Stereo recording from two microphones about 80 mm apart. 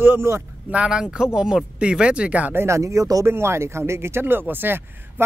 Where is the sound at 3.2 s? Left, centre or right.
Right.